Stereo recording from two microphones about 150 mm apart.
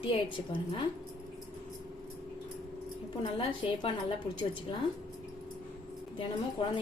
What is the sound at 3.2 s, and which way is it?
A woman's voice, 35° left (ahead or behind).